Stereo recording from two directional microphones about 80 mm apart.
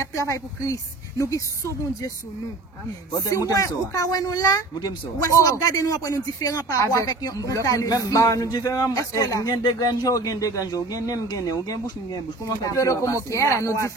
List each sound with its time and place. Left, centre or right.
0.0 s a woman's voice: left
3.1 s a woman's voice: left